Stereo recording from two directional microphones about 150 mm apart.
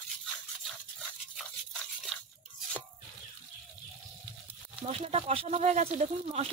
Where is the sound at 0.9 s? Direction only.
Centre (ahead or behind).